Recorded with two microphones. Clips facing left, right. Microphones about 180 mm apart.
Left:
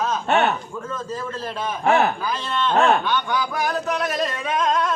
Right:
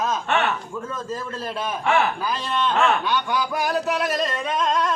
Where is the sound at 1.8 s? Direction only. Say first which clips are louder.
Left 3 dB; 40° left (ahead or behind).